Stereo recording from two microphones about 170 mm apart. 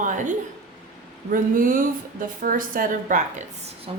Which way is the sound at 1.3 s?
55° right (ahead or behind).